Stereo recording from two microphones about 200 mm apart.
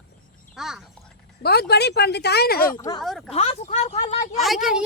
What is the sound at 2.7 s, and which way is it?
Speech, 15° left (ahead or behind).